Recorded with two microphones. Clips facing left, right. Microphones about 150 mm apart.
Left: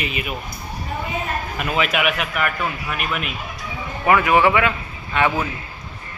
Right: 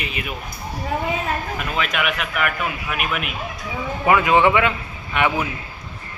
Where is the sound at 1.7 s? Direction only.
5° left (ahead or behind).